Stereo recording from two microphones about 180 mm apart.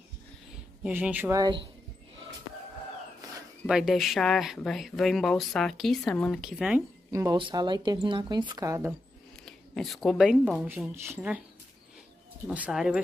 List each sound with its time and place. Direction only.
0.8 s speech: 10° right (ahead or behind); by 1.7 s 25° right (ahead or behind)
3.6 s speech: 5° right (ahead or behind)
7.1 s speech: 20° right (ahead or behind)
9.5 s speech: centre (ahead or behind)
12.4 s speech: 5° right (ahead or behind)